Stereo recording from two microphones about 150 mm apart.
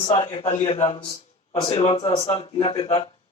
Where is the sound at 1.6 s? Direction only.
35° left (ahead or behind).